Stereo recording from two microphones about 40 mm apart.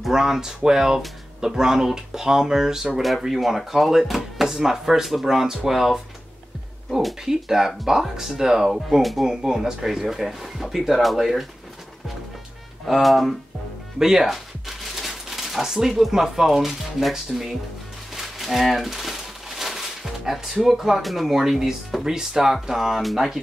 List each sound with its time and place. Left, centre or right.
0.1 s speech: centre
3.0 s speech: centre
7.2 s speech: centre
9.2 s speech: centre
12.8 s speech: centre
13.9 s a sound: centre
16.0 s speech: centre